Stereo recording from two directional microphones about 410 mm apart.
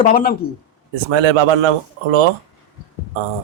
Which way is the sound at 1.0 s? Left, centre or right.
Right.